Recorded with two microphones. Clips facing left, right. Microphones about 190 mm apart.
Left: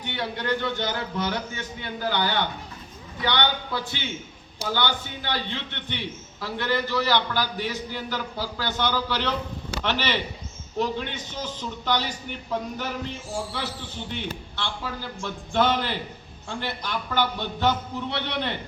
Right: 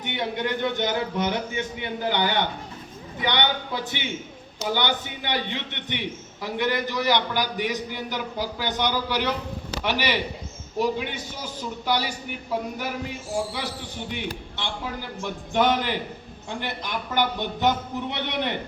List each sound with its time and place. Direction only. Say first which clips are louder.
0.0 s a man's voice: right 2 dB; 20° right (ahead or behind)